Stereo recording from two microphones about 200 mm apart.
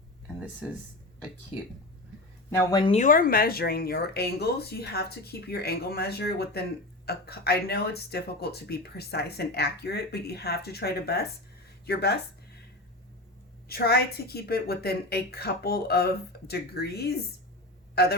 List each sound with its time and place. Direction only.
0.6 s speech: 5° right (ahead or behind)
2.6 s speech: 20° left (ahead or behind)
3.0 s speech: 45° left (ahead or behind)
13.7 s speech: 50° left (ahead or behind)